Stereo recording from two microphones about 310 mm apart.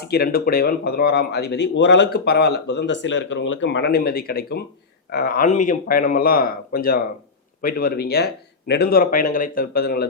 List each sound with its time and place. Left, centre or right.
0.0 s speech: left